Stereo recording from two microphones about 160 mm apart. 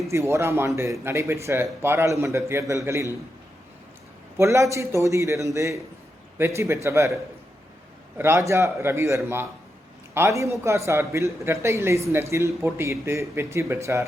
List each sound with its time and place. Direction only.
0.1 s a man's voice: 15° right (ahead or behind)
4.4 s a man's voice: 15° right (ahead or behind)
8.2 s a man's voice: 15° right (ahead or behind)